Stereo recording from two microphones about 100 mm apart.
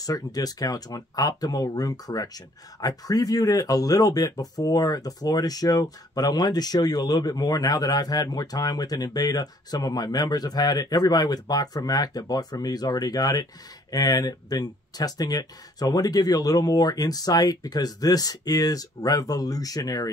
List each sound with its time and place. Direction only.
0.0 s speech: 40° left (ahead or behind)